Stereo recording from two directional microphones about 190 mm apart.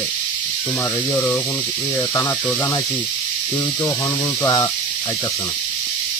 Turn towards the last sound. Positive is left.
turn(degrees=20)  # may be behind; listen again after turning